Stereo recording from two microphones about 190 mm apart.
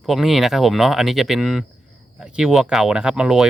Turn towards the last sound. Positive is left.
turn(degrees=-5)  # may be behind; listen again after turning